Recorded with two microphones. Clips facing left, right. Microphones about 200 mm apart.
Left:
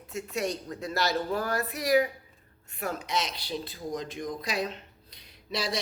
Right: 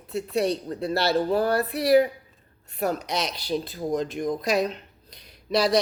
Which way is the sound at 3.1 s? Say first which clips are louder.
Right 3 dB; 70° right (ahead or behind).